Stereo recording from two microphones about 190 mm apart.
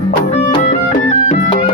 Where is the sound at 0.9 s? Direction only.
40° left (ahead or behind).